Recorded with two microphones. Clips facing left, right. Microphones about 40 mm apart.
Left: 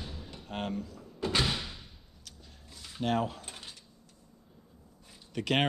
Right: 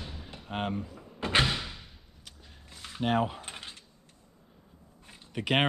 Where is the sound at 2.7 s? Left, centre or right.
Right.